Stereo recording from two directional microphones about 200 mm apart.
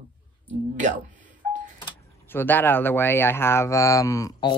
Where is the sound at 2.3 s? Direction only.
10° left (ahead or behind).